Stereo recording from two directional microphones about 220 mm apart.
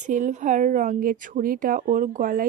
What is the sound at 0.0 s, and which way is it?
Speech, 35° right (ahead or behind).